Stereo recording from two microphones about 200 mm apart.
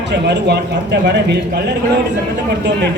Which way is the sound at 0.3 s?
60° right (ahead or behind).